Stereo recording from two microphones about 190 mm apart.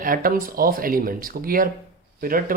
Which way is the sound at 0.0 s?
50° right (ahead or behind).